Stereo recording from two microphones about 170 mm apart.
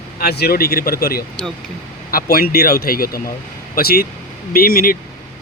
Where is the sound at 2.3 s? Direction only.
65° left (ahead or behind).